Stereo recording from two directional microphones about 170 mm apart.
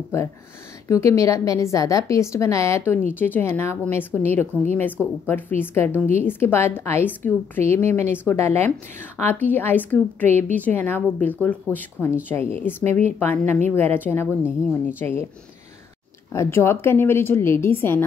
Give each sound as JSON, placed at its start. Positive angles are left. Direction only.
{"t": 0.8, "sound": "a woman's voice", "side_deg": 20}
{"t": 16.3, "sound": "speech", "side_deg": 15}